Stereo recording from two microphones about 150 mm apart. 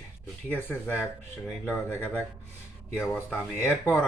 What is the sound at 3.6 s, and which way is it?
Speech, 15° left (ahead or behind).